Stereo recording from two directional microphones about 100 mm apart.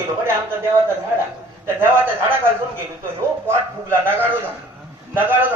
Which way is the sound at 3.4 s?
25° right (ahead or behind).